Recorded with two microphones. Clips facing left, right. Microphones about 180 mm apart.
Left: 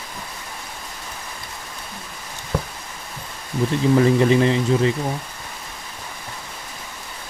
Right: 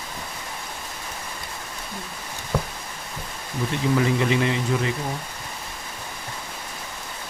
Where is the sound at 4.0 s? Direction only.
35° left (ahead or behind).